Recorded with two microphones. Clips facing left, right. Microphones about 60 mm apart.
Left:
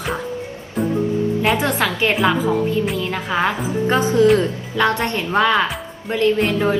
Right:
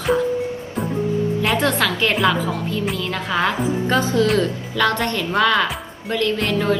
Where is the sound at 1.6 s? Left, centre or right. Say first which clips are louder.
Even; centre.